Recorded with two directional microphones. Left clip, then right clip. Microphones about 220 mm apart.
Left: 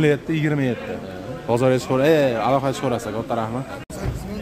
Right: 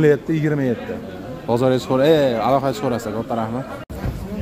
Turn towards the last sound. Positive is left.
turn(degrees=-5)  # may be behind; listen again after turning